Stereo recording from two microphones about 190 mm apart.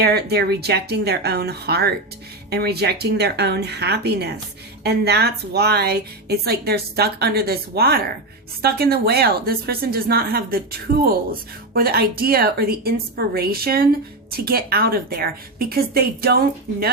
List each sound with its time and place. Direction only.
0.0 s a woman's voice: 60° right (ahead or behind)